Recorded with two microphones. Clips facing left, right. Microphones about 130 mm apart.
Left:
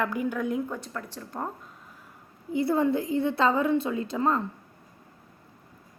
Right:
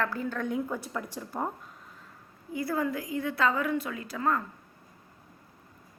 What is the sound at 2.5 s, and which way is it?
A woman's voice, 25° left (ahead or behind).